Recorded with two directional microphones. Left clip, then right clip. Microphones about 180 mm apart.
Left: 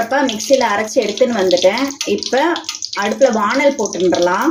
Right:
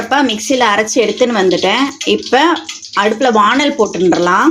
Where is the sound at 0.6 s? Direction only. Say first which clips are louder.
Right 4 dB; 35° right (ahead or behind).